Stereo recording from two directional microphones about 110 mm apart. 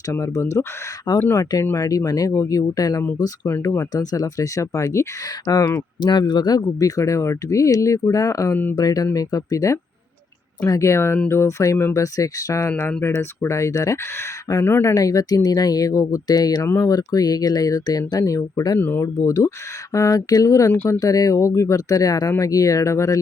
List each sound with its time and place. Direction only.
0.1 s speech: 30° left (ahead or behind)
1.1 s speech: 40° left (ahead or behind)
18.8 s speech: 20° left (ahead or behind)